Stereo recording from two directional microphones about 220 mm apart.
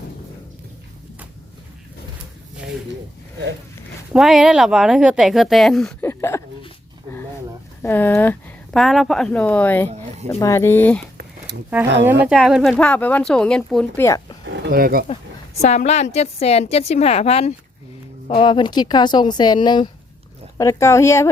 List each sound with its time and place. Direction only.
4.1 s speech: centre (ahead or behind)
6.1 s a sound: 10° left (ahead or behind)
7.8 s speech: 10° left (ahead or behind)
11.5 s speech: 50° right (ahead or behind)
12.2 s speech: 5° right (ahead or behind)
14.4 s livestock: 45° right (ahead or behind)
15.6 s a woman's voice: 30° left (ahead or behind); by 21.2 s 10° left (ahead or behind)